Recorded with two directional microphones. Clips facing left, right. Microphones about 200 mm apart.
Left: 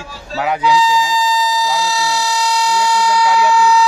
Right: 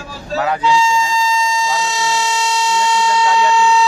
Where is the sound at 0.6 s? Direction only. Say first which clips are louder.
Left 3 dB; 25° right (ahead or behind).